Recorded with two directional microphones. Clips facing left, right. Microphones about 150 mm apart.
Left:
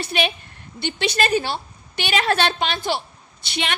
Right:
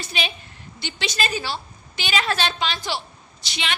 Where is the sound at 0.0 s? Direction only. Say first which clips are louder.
Left 6 dB; 60° left (ahead or behind).